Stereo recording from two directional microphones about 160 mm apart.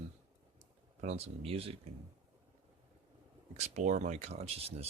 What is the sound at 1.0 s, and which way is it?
Speech, 45° right (ahead or behind).